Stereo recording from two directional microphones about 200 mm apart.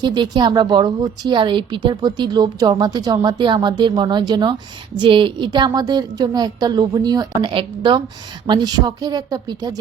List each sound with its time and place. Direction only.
0.0 s a woman's voice: 20° right (ahead or behind)